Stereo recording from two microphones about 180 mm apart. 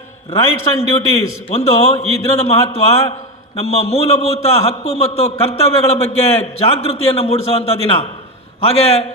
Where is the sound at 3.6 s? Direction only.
35° left (ahead or behind).